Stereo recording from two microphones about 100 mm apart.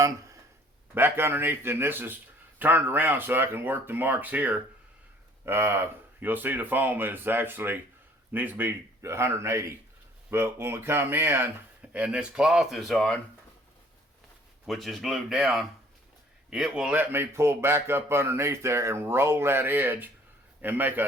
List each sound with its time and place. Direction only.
0.9 s speech: 20° right (ahead or behind); by 13.1 s centre (ahead or behind)
14.7 s a man's voice: centre (ahead or behind); by 21.0 s 20° right (ahead or behind)